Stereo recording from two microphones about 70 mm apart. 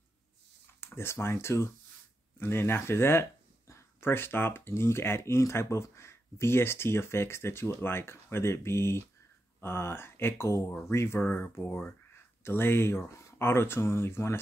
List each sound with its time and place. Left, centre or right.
0.7 s speech: left